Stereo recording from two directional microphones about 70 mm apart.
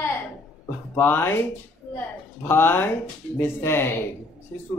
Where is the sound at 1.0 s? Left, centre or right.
Left.